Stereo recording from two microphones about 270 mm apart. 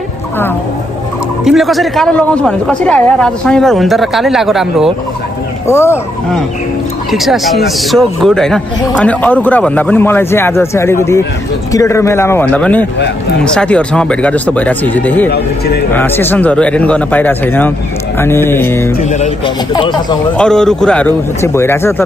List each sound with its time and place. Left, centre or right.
1.4 s a man's voice: centre
5.7 s a man's voice: centre
15.2 s speech: left
15.9 s speech: centre
18.9 s music: left
19.7 s speech: centre
20.3 s a man's voice: centre